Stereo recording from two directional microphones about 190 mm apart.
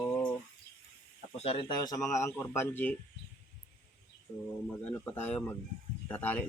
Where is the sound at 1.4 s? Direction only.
30° left (ahead or behind); by 2.9 s 10° left (ahead or behind).